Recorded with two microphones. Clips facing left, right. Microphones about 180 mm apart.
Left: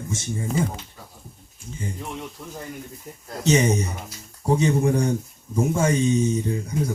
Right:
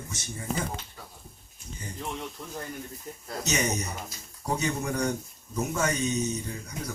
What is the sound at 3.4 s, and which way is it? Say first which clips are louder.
Speech: left 9 dB; 30° left (ahead or behind).